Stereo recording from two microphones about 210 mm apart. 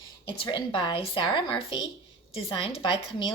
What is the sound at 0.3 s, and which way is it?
A woman's voice, 25° left (ahead or behind).